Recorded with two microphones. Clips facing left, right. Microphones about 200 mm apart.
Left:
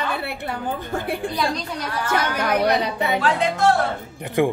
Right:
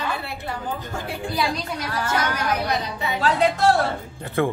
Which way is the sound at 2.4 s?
60° left (ahead or behind).